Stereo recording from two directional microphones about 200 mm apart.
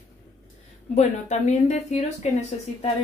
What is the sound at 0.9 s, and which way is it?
A woman's voice, 35° left (ahead or behind).